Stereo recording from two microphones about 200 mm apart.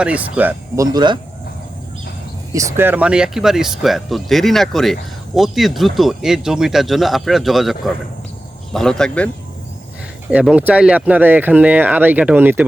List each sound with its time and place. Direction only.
0.0 s speech: 5° right (ahead or behind)
0.9 s speech: 20° right (ahead or behind)
2.5 s speech: 15° right (ahead or behind); by 9.3 s 5° left (ahead or behind)
10.3 s speech: 5° right (ahead or behind)